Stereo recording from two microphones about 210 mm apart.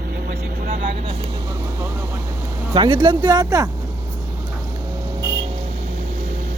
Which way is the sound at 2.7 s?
20° right (ahead or behind).